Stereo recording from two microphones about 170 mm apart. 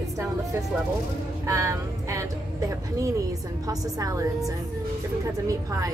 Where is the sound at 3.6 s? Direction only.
20° right (ahead or behind).